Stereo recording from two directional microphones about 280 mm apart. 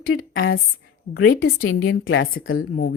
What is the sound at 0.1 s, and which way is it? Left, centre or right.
Speech, left.